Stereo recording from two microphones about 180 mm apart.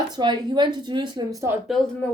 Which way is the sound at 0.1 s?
25° right (ahead or behind).